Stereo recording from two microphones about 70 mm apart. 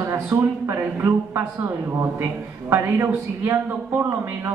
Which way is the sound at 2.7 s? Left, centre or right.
Right.